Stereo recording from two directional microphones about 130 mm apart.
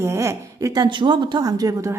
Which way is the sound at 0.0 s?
20° right (ahead or behind).